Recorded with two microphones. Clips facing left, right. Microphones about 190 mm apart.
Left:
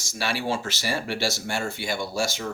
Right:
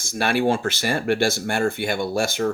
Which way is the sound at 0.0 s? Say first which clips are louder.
Right 8 dB; 55° right (ahead or behind).